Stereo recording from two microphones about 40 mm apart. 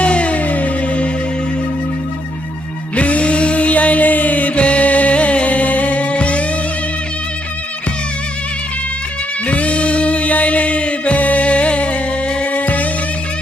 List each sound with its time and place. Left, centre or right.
0.0 s music: left
2.9 s music: left
9.5 s music: left